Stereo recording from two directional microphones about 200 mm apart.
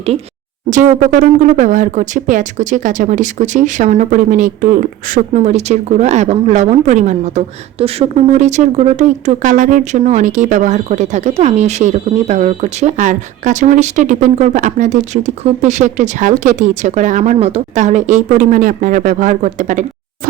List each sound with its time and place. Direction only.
0.7 s speech: 40° right (ahead or behind)